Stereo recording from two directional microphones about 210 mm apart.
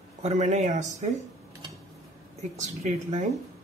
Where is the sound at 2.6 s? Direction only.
35° right (ahead or behind).